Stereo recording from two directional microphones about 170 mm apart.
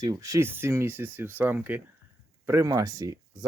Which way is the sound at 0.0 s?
20° right (ahead or behind).